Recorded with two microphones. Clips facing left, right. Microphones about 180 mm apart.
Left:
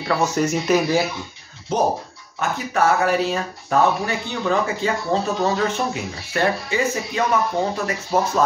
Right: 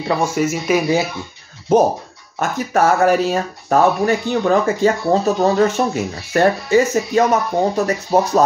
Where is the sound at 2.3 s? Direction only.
45° right (ahead or behind).